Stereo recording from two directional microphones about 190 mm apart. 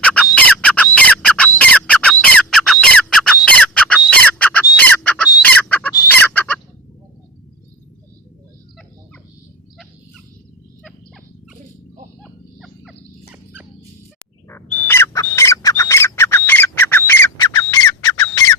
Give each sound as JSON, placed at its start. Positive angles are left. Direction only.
{"t": 0.0, "sound": "squawk", "side_deg": 5}
{"t": 4.1, "sound": "bird", "side_deg": 10}
{"t": 4.8, "sound": "squawk", "side_deg": 10}
{"t": 5.4, "sound": "fowl", "side_deg": 10}
{"t": 12.2, "sound": "wild animals", "side_deg": 0}
{"t": 14.5, "sound": "bird", "side_deg": 10}
{"t": 17.6, "sound": "squawk", "side_deg": 15}